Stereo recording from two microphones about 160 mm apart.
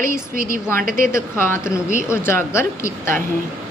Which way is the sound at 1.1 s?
15° left (ahead or behind).